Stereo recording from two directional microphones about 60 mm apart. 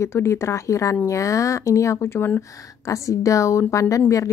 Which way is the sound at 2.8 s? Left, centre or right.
Left.